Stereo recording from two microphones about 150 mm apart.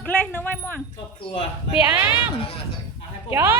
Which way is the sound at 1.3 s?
35° left (ahead or behind).